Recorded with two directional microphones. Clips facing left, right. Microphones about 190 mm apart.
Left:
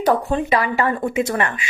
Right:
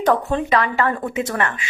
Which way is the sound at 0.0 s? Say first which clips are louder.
Even; 10° left (ahead or behind).